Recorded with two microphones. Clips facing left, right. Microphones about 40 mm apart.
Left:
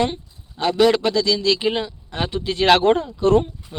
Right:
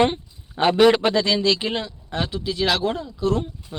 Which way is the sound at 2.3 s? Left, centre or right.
Left.